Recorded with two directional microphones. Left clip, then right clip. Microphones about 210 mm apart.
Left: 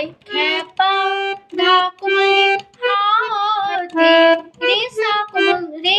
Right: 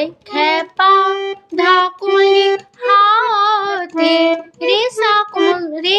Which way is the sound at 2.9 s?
60° right (ahead or behind).